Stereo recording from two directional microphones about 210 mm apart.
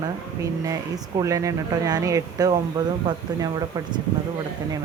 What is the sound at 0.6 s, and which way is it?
Speech, 15° right (ahead or behind).